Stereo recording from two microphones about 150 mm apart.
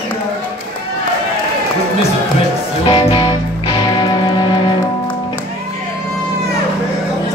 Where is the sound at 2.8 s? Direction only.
35° left (ahead or behind).